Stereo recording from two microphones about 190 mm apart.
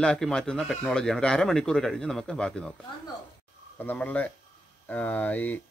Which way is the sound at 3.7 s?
10° left (ahead or behind).